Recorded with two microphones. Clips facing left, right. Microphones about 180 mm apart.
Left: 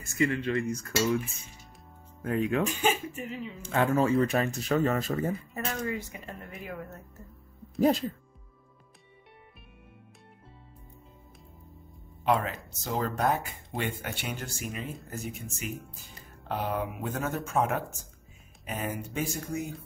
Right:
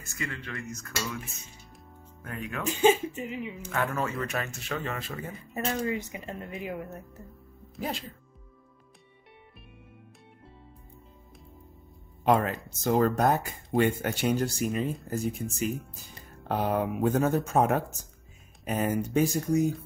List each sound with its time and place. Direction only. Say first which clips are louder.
0.2 s cutlery: left 10 dB; 20° left (ahead or behind)
2.7 s speech: right 6 dB; 20° right (ahead or behind)
3.6 s speech: left 6 dB; 25° left (ahead or behind)
5.5 s speech: right 3 dB; 20° right (ahead or behind)
12.3 s speech: right 3 dB; 50° right (ahead or behind)